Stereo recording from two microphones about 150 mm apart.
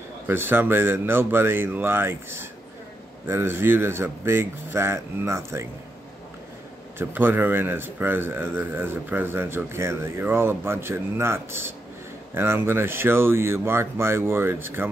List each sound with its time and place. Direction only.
0.3 s a man's voice: 15° right (ahead or behind)
7.0 s a man's voice: 15° right (ahead or behind)